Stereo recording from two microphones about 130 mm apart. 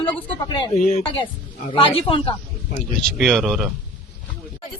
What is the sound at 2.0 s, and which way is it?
Speech, 45° left (ahead or behind).